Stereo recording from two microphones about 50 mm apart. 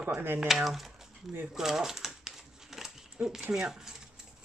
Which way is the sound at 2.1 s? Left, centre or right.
Centre.